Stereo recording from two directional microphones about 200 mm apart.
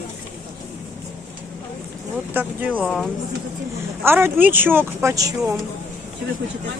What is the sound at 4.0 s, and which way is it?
A woman's voice, 10° right (ahead or behind).